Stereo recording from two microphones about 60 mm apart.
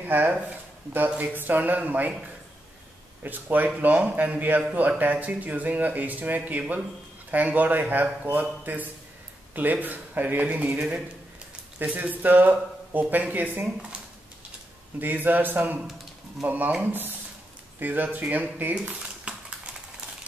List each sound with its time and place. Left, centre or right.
0.0 s speech: right
3.3 s speech: right
15.0 s a man's voice: right
17.7 s speech: right
18.8 s a sound: centre